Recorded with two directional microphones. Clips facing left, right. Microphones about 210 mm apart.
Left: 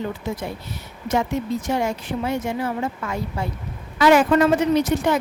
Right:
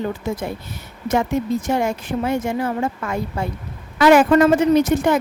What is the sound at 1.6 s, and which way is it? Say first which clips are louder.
A woman's voice: right 2 dB; 50° right (ahead or behind).